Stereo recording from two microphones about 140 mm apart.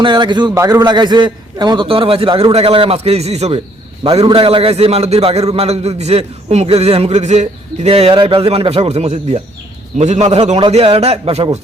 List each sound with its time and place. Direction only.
0.0 s a man's voice: 35° right (ahead or behind); by 3.6 s 50° right (ahead or behind)
4.3 s a man's voice: 40° right (ahead or behind)